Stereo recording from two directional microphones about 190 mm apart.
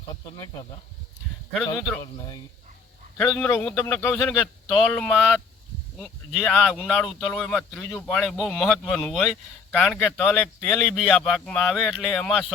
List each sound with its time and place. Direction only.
2.0 s speech: 20° left (ahead or behind)
3.2 s a man's voice: 10° left (ahead or behind)